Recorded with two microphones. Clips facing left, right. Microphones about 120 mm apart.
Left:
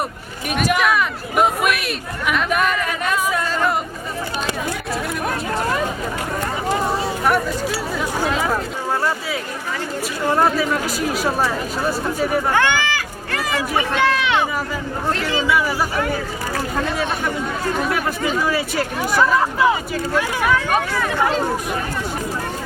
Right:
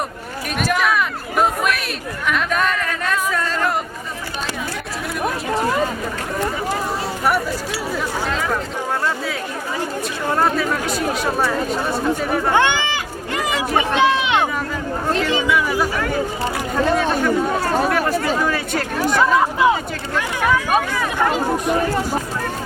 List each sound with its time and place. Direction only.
0.5 s a sound: centre (ahead or behind)
8.2 s a sound: 15° left (ahead or behind)
10.2 s speech: 5° left (ahead or behind)
12.5 s run: 20° right (ahead or behind)
17.0 s speech: centre (ahead or behind)
18.4 s speech: 5° left (ahead or behind)
19.2 s speech: 20° right (ahead or behind)